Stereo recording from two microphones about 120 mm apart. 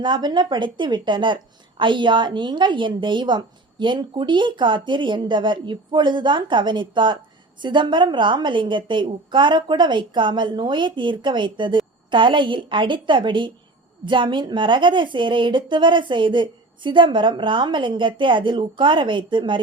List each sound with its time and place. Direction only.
0.0 s a woman's voice: 40° right (ahead or behind)